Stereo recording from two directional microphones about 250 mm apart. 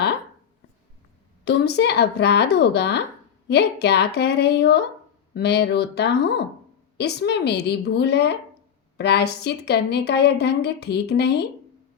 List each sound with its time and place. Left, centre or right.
1.5 s a woman's voice: left